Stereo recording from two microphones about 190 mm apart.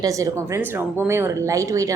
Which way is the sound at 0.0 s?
15° right (ahead or behind).